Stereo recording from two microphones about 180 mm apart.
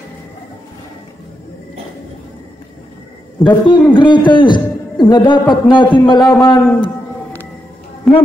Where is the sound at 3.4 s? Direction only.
25° left (ahead or behind).